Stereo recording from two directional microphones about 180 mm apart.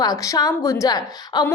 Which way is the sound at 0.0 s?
20° left (ahead or behind).